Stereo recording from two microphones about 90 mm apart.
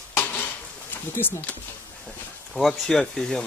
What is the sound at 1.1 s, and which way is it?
Speech, 25° left (ahead or behind).